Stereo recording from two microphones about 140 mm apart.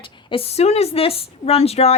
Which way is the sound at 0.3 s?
45° left (ahead or behind).